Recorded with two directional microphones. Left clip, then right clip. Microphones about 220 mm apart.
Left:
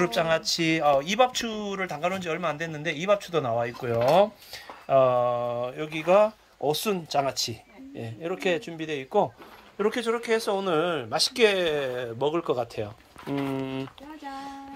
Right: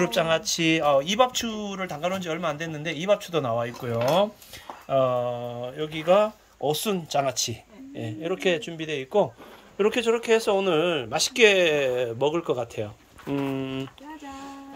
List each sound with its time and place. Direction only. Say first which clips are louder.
0.0 s speech: right 1 dB; centre (ahead or behind)